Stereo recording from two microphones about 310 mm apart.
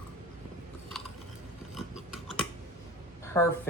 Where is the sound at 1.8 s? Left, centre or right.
Centre.